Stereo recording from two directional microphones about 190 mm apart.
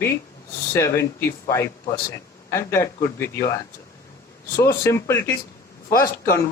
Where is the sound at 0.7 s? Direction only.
15° left (ahead or behind).